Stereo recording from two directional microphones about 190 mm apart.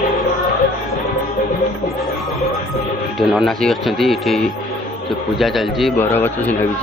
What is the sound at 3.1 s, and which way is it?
Speech, centre (ahead or behind).